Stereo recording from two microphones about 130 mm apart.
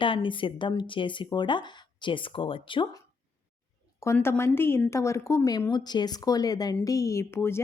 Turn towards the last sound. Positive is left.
turn(degrees=20)  # may be behind; listen again after turning